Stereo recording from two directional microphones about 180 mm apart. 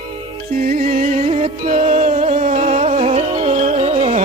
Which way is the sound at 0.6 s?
50° right (ahead or behind).